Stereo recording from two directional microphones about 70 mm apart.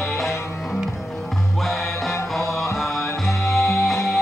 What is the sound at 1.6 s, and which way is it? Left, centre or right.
Music, centre.